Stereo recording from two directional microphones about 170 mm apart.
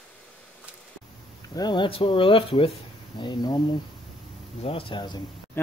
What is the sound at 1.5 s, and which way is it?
Speech, 25° left (ahead or behind).